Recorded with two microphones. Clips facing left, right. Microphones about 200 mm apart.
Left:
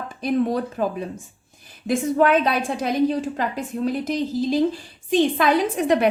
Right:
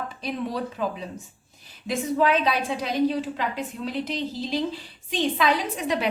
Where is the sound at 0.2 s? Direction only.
50° left (ahead or behind).